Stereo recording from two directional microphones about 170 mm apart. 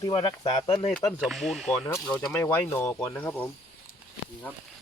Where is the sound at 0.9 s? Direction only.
Centre (ahead or behind).